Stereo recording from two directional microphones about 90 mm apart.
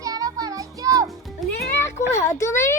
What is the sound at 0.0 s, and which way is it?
Music, 40° right (ahead or behind).